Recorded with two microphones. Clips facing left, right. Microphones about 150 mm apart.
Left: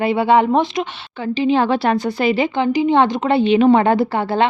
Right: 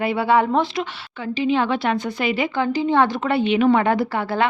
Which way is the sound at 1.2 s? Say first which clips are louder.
Left 4 dB; 35° left (ahead or behind).